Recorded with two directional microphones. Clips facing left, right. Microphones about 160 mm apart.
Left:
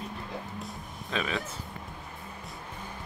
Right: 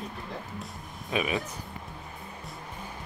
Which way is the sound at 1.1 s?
15° right (ahead or behind).